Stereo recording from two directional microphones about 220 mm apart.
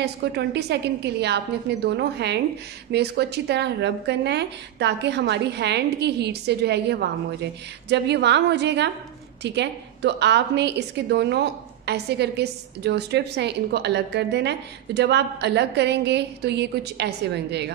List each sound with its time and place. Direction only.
0.0 s a woman's voice: 50° right (ahead or behind)